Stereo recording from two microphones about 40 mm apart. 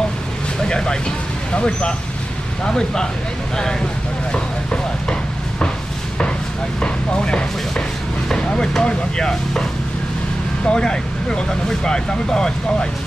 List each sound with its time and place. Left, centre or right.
0.6 s speech: centre
4.3 s a sound: left
6.8 s speech: left
10.7 s speech: centre